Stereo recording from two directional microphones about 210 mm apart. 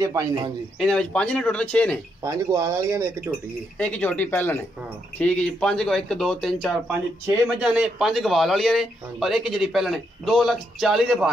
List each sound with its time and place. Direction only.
0.0 s speech: 15° right (ahead or behind)
0.7 s a man's voice: 5° left (ahead or behind)
2.2 s speech: 15° right (ahead or behind)
3.7 s a man's voice: 5° left (ahead or behind)